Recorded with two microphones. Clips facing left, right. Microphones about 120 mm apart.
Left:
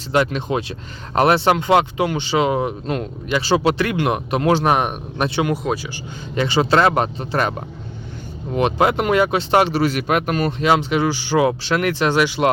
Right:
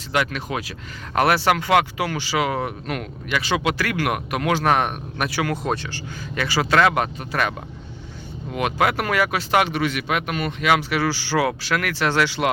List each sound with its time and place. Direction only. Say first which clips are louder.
0.1 s speech: left 5 dB; 30° left (ahead or behind)
4.7 s speech: left 2 dB; 15° left (ahead or behind)
5.6 s speech: left 2 dB; 5° left (ahead or behind)
5.9 s speech: left 3 dB; 25° left (ahead or behind)
8.5 s speech: left 4 dB; 30° left (ahead or behind)